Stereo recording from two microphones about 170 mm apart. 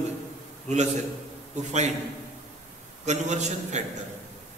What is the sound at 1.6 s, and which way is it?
Speech, 40° right (ahead or behind).